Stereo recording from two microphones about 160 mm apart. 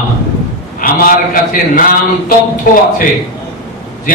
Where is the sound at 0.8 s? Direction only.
60° left (ahead or behind).